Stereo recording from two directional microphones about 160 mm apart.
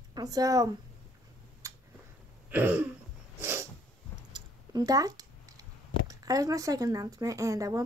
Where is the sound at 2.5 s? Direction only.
10° right (ahead or behind).